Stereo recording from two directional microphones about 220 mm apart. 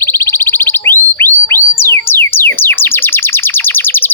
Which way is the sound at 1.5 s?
10° left (ahead or behind).